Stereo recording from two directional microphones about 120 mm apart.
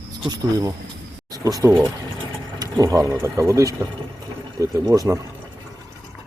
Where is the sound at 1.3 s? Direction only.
30° right (ahead or behind).